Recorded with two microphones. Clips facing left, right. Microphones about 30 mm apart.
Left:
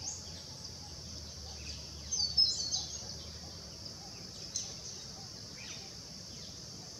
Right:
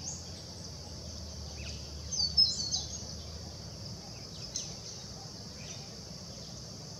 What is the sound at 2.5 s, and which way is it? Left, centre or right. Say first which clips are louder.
Bird: right 1 dB; centre.